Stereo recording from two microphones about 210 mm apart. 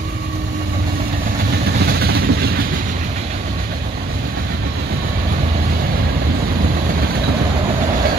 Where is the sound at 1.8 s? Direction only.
50° right (ahead or behind).